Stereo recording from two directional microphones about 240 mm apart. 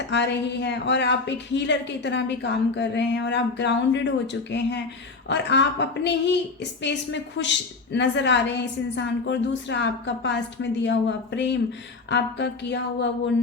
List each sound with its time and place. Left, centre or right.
0.1 s speech: left